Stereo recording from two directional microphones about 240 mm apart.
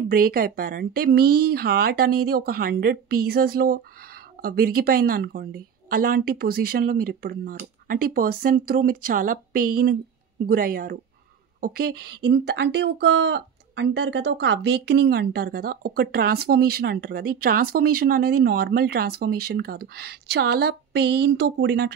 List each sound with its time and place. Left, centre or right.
0.1 s speech: right